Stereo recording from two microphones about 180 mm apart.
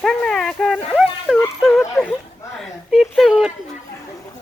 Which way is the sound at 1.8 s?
5° left (ahead or behind).